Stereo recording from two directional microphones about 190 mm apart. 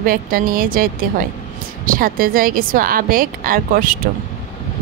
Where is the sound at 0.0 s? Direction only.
50° right (ahead or behind).